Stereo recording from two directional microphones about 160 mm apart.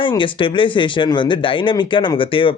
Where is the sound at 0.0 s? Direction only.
30° left (ahead or behind).